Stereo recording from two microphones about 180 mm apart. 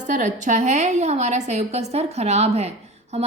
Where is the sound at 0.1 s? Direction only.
45° right (ahead or behind).